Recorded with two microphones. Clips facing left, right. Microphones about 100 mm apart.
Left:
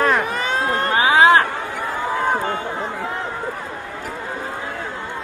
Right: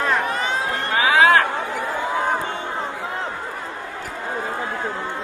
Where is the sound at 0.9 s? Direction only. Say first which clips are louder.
Left 1 dB; 20° left (ahead or behind).